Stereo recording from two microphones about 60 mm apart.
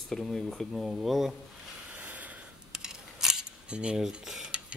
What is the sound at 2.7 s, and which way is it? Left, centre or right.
Cutlery, centre.